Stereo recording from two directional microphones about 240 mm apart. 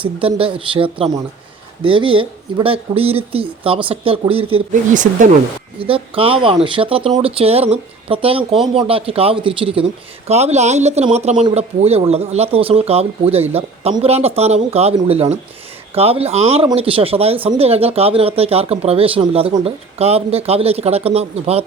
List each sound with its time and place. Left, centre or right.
0.0 s speech: right